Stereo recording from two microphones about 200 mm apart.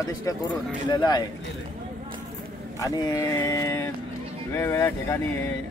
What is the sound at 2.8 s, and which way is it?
Speech, 15° left (ahead or behind).